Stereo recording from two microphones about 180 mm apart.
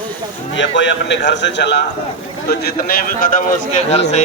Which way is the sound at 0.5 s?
90° left.